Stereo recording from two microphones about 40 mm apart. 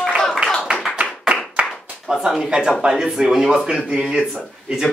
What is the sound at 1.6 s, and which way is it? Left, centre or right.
Clapping, right.